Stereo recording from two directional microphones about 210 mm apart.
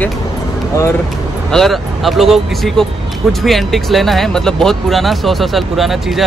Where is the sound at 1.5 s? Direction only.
Centre (ahead or behind).